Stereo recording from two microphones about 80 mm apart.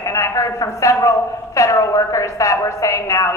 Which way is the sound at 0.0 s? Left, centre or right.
Left.